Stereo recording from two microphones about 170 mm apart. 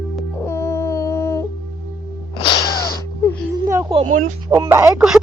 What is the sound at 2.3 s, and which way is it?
Sneeze, 25° left (ahead or behind).